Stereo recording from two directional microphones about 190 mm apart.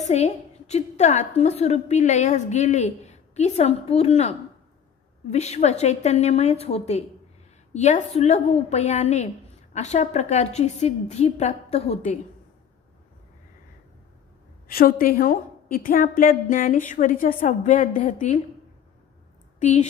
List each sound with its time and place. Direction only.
0.0 s a woman's voice: 35° left (ahead or behind)
14.7 s a woman's voice: 50° left (ahead or behind)
19.6 s a woman's voice: 40° left (ahead or behind)